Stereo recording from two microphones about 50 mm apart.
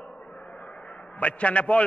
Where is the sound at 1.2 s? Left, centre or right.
Left.